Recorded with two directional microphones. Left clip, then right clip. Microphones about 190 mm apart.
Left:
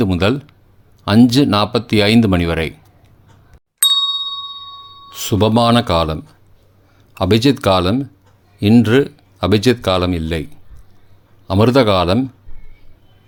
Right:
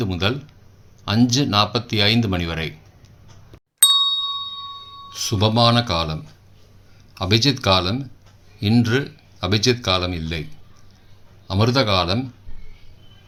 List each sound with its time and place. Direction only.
0.0 s speech: 50° left (ahead or behind)
3.8 s ding: centre (ahead or behind)
5.2 s speech: 50° left (ahead or behind)
11.4 s speech: 50° left (ahead or behind)